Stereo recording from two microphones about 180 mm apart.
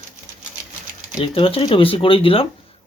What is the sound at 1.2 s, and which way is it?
Speech, 30° left (ahead or behind).